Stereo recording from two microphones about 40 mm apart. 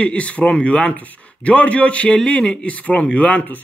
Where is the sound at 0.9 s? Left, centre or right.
Left.